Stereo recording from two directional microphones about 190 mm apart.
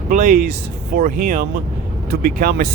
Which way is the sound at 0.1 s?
45° right (ahead or behind).